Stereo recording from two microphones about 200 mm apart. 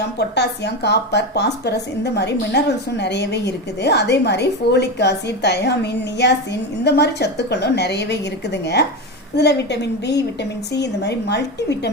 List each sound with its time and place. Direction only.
0.2 s speech: 55° left (ahead or behind)